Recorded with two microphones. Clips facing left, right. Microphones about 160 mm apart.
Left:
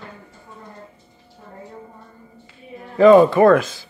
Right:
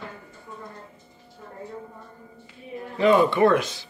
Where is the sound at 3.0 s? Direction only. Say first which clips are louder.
Left 8 dB; 45° left (ahead or behind).